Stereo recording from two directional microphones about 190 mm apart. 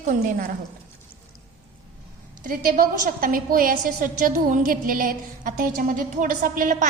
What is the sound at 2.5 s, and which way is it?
A woman's voice, 50° right (ahead or behind).